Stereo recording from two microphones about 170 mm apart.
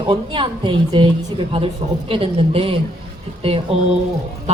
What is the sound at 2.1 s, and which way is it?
Speech, 35° right (ahead or behind).